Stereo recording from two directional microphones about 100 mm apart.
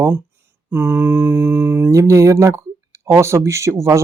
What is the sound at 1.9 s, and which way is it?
Speech, 30° right (ahead or behind).